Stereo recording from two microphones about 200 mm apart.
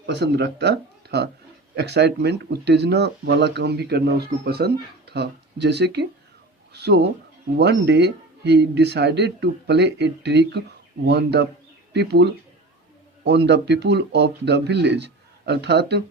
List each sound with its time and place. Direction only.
0.0 s speech: 60° right (ahead or behind)